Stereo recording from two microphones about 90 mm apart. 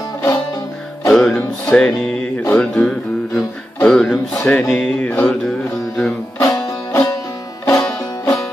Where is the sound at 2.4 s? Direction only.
15° left (ahead or behind).